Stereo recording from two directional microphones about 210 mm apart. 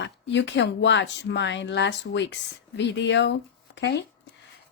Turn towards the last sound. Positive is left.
turn(degrees=55)  # may be behind; listen again after turning